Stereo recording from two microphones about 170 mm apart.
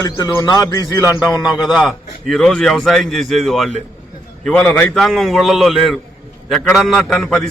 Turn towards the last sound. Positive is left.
turn(degrees=5)  # may be behind; listen again after turning